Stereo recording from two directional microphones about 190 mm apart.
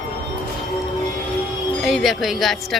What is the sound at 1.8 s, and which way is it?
Speech, centre (ahead or behind).